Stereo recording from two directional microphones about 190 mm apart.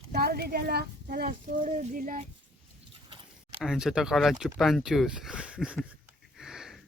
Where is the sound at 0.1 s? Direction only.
55° right (ahead or behind).